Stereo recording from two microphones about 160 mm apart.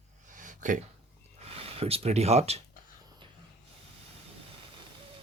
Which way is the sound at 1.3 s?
40° right (ahead or behind).